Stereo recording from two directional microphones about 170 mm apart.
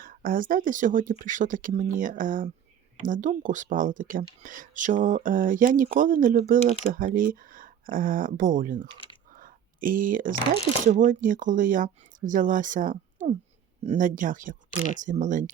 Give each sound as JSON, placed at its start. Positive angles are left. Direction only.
{"t": 0.0, "sound": "speech", "side_deg": -55}